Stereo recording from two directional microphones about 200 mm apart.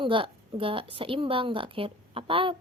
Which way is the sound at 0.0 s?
25° right (ahead or behind).